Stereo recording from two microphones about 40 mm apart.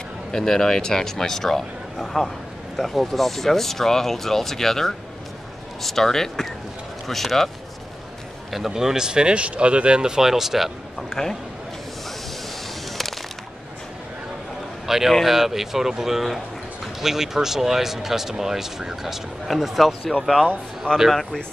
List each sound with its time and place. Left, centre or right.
0.3 s speech: centre
8.5 s speech: centre
11.0 s speech: centre
14.9 s speech: centre
19.4 s speech: centre